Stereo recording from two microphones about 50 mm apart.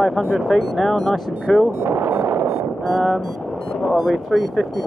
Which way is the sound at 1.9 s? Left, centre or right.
Right.